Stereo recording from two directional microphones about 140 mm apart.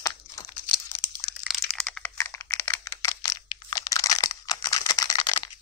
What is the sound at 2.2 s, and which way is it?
Computer keyboard, 20° left (ahead or behind).